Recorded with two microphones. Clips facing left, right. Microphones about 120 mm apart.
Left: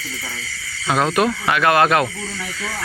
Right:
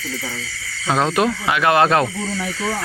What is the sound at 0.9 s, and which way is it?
Speech, 25° right (ahead or behind).